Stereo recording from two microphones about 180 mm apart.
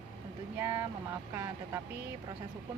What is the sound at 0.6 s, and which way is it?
Speech, 15° right (ahead or behind).